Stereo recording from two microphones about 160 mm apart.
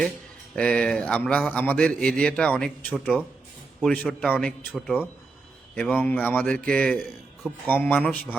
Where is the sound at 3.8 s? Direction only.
5° left (ahead or behind).